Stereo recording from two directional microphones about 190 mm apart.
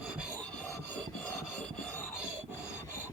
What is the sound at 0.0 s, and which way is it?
Rub, 5° right (ahead or behind).